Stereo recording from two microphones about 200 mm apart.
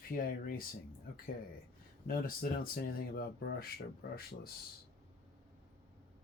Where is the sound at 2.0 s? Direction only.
45° left (ahead or behind).